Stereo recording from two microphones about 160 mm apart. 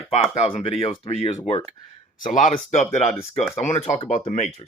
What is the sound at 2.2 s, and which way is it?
Speech, 50° left (ahead or behind).